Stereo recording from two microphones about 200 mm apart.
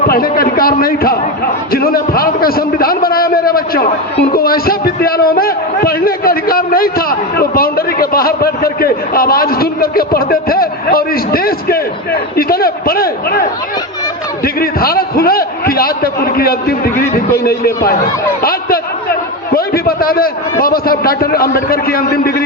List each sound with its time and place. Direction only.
0.1 s a man's voice: 50° left (ahead or behind)
14.4 s a man's voice: 50° left (ahead or behind)
19.5 s a man's voice: 50° left (ahead or behind)